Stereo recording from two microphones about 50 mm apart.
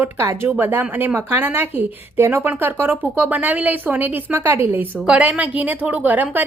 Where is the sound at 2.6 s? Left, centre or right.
Right.